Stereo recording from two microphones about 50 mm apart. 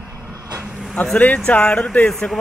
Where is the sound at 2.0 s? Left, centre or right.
Centre.